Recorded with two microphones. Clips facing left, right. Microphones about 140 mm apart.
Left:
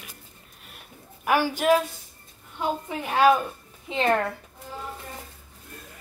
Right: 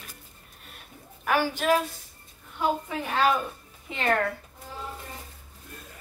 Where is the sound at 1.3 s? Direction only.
10° left (ahead or behind).